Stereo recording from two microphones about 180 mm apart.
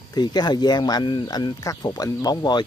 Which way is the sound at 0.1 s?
25° left (ahead or behind).